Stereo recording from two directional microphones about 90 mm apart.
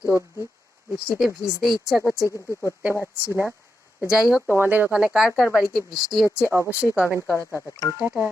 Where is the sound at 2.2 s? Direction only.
35° left (ahead or behind).